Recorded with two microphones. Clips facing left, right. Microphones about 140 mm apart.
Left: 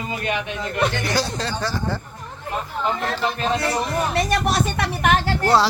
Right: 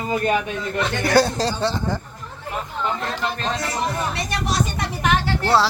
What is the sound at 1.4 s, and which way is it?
Speech, 35° right (ahead or behind).